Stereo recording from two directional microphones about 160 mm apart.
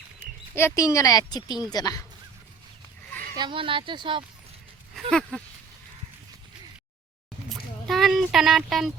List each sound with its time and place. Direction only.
0.2 s speech: 15° left (ahead or behind)
3.3 s speech: 30° right (ahead or behind)
7.5 s a sound: centre (ahead or behind)